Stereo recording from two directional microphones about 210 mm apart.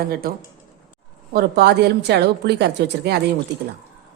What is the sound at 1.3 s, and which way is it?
A woman's voice, 50° right (ahead or behind).